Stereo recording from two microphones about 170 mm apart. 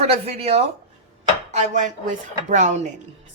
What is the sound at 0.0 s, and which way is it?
A woman's voice, 35° right (ahead or behind).